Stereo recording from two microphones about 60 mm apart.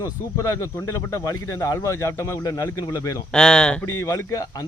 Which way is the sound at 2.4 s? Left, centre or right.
Left.